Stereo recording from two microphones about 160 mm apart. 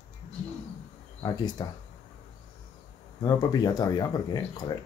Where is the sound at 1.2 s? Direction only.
25° left (ahead or behind).